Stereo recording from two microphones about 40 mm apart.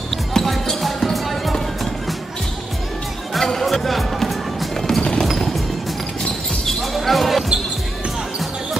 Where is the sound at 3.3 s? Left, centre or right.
Centre.